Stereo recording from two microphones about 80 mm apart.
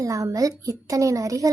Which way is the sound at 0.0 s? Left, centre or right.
Right.